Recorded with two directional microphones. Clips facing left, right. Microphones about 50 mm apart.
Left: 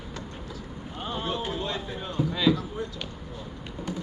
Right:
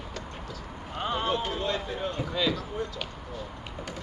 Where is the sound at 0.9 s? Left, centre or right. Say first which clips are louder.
Right 3 dB; right.